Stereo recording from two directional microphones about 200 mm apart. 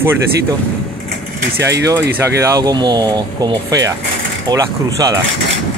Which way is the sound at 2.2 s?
15° right (ahead or behind).